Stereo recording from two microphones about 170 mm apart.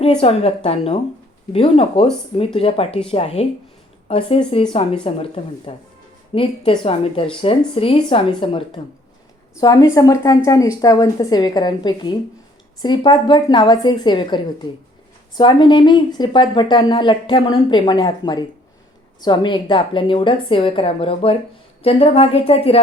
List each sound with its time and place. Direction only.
0.2 s a woman's voice: 35° left (ahead or behind)